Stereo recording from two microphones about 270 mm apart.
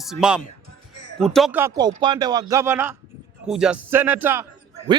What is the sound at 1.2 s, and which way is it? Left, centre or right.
Speech, centre.